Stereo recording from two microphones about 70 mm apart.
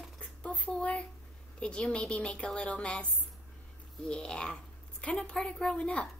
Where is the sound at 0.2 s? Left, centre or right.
Centre.